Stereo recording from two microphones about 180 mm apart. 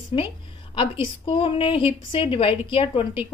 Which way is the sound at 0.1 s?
30° left (ahead or behind).